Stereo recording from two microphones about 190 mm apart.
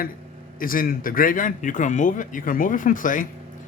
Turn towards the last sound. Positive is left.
turn(degrees=45)  # may be behind; listen again after turning